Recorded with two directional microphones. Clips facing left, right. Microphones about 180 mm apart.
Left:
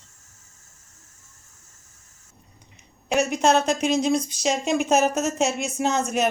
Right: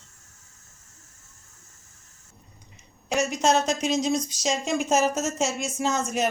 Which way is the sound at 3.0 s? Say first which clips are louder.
Left 3 dB; 60° left (ahead or behind).